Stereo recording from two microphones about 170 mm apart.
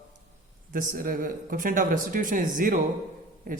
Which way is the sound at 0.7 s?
55° right (ahead or behind).